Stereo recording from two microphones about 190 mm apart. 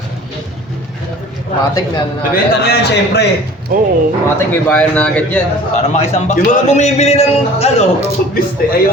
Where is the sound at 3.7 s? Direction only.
50° right (ahead or behind).